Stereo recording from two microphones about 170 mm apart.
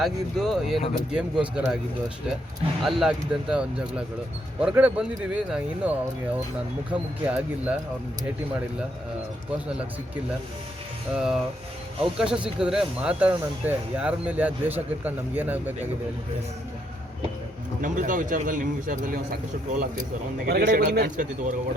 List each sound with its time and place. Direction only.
0.0 s speech: centre (ahead or behind)
2.8 s speech: centre (ahead or behind)
6.9 s speech: 10° right (ahead or behind)
11.1 s speech: 5° right (ahead or behind)
17.8 s speech: 50° right (ahead or behind)
20.5 s speech: 65° right (ahead or behind)